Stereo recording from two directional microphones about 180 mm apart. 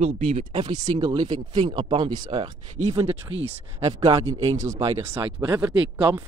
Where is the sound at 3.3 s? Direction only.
90° right.